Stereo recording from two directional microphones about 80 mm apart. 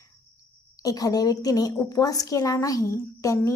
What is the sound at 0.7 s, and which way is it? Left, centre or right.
A woman's voice, left.